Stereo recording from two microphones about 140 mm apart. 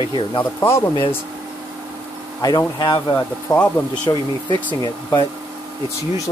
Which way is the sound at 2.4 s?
30° left (ahead or behind).